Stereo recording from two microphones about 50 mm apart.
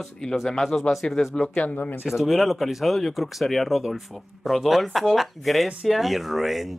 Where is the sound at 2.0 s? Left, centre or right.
Centre.